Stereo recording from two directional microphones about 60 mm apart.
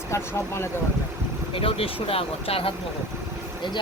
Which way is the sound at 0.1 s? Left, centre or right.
Left.